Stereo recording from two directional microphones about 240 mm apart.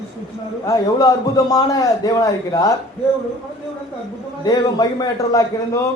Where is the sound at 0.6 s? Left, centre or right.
Centre.